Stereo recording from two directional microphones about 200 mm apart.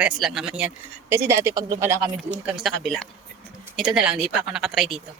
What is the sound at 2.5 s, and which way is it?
Speech, centre (ahead or behind).